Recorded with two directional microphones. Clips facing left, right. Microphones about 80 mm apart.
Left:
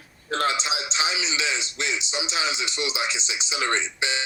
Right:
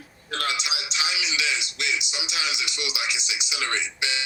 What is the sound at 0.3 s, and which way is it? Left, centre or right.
A man's voice, left.